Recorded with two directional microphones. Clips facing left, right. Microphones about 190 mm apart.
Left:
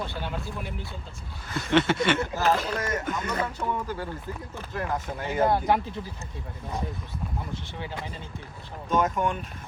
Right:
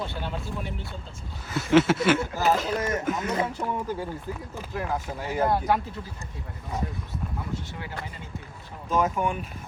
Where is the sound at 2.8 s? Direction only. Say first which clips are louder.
Right 2 dB; 25° right (ahead or behind).